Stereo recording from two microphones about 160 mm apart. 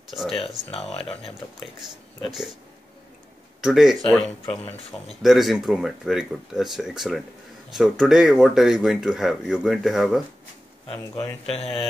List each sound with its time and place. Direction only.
0.1 s speech: centre (ahead or behind)
0.9 s speech: 35° left (ahead or behind)
3.6 s speech: centre (ahead or behind)
11.5 s speech: 40° left (ahead or behind)